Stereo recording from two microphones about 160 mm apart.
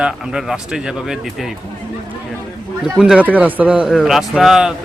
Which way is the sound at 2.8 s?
5° right (ahead or behind).